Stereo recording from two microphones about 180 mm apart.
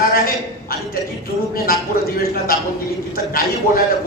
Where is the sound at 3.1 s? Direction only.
55° left (ahead or behind).